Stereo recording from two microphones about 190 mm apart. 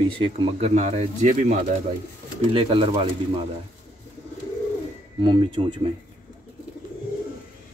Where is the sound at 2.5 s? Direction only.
25° right (ahead or behind).